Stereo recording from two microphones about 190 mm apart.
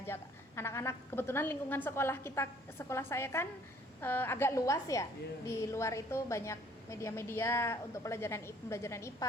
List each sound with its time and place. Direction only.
0.0 s a woman's voice: 10° left (ahead or behind)